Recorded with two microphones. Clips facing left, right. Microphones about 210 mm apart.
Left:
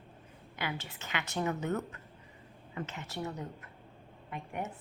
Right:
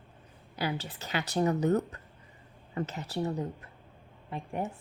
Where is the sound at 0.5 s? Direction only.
35° right (ahead or behind).